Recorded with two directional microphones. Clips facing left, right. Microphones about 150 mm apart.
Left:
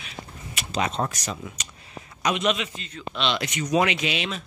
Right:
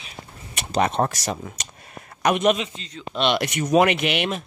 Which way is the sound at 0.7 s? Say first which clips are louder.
Right 5 dB; 55° right (ahead or behind).